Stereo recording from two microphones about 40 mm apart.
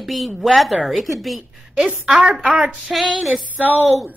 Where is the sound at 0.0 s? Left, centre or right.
Centre.